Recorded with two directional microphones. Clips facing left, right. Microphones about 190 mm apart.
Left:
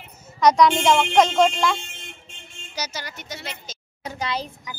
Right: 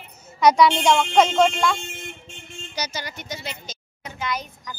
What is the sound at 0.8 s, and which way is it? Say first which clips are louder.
Speech: even; centre (ahead or behind).